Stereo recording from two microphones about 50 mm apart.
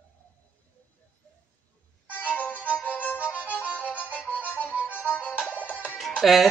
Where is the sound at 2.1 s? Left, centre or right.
Left.